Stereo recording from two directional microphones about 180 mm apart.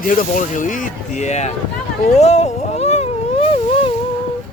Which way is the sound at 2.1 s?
40° left (ahead or behind).